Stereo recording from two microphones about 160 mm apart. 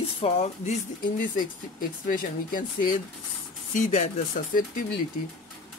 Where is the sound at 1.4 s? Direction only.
60° left (ahead or behind).